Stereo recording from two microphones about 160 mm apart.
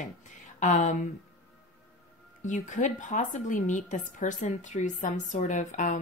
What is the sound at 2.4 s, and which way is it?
A woman's voice, 50° left (ahead or behind).